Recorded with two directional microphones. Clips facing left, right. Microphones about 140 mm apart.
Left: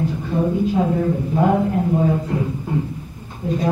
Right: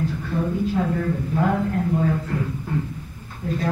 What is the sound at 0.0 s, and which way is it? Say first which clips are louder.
Speech: left 4 dB; 20° left (ahead or behind).